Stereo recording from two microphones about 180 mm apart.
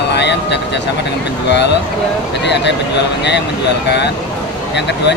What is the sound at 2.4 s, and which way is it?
Speech, 75° left (ahead or behind).